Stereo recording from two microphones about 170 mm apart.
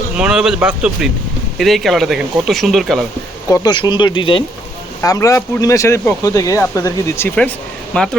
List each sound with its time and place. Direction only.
0.2 s speech: 5° right (ahead or behind)
3.5 s speech: 25° left (ahead or behind); by 7.5 s 10° left (ahead or behind)